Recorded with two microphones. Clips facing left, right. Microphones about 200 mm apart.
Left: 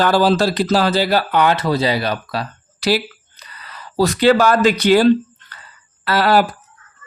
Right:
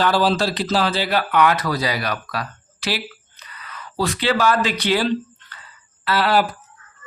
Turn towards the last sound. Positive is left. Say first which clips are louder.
# left 4 dB
turn(degrees=45)  # may be behind; listen again after turning